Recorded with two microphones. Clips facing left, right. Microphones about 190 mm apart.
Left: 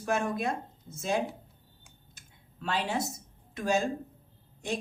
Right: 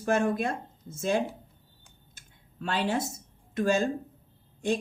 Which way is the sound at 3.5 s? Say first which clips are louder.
Right 3 dB; 50° right (ahead or behind).